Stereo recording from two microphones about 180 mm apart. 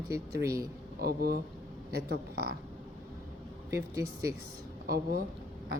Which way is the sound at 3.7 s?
15° right (ahead or behind).